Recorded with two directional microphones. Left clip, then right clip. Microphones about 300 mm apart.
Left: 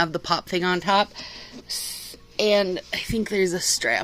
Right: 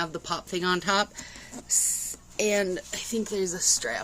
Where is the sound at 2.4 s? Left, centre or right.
Centre; by 4.0 s left.